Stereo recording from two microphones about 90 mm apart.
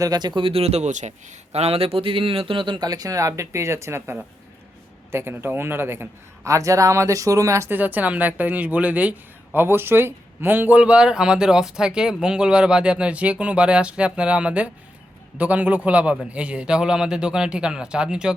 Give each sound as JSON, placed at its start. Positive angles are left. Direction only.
{"t": 0.0, "sound": "speech", "side_deg": -50}
{"t": 1.7, "sound": "a man's voice", "side_deg": -90}
{"t": 7.7, "sound": "a woman's voice", "side_deg": -20}